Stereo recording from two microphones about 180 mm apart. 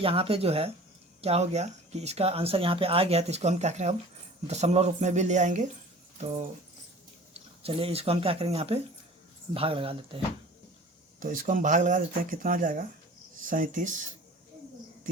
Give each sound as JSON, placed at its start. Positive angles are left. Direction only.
{"t": 0.0, "sound": "speech", "side_deg": -30}
{"t": 7.3, "sound": "speech", "side_deg": -35}
{"t": 11.2, "sound": "speech", "side_deg": -45}